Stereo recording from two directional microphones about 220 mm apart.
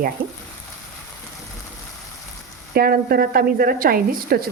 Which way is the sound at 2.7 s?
45° right (ahead or behind).